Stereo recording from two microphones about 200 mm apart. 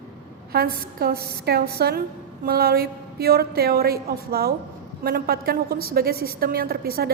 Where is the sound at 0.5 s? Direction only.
50° right (ahead or behind).